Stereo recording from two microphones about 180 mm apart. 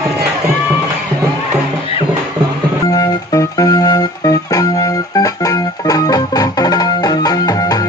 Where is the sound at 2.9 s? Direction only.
20° left (ahead or behind).